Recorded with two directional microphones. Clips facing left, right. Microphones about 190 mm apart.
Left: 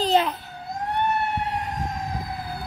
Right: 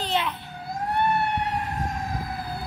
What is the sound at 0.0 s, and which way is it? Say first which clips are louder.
Emergency vehicle: left 6 dB; 40° left (ahead or behind).